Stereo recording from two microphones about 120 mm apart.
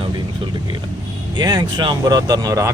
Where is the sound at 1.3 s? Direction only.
35° right (ahead or behind).